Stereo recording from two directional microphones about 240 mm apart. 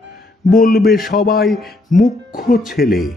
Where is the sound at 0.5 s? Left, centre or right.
Left.